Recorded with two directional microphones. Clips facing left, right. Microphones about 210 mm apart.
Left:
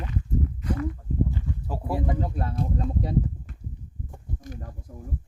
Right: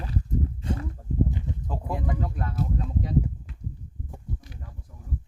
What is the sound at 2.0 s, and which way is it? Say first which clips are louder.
Speech: left 3 dB; 25° left (ahead or behind).